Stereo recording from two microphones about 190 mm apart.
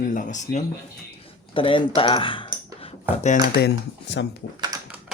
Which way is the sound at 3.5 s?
65° left (ahead or behind).